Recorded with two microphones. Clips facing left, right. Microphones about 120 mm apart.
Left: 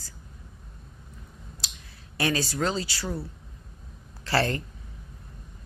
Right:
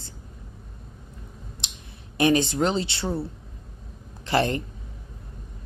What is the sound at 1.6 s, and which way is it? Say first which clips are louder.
Clicking: left 1 dB; 20° right (ahead or behind).